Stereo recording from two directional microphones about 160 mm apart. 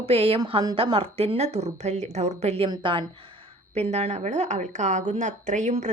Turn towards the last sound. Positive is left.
turn(degrees=-50)  # may be behind; listen again after turning